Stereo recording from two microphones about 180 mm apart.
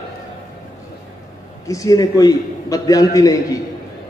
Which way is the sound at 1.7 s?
20° left (ahead or behind).